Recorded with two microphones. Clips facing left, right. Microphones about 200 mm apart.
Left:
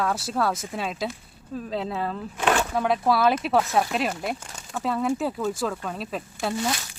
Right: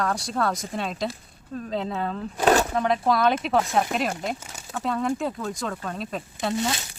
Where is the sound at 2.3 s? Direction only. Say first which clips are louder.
Right 4 dB; 35° right (ahead or behind).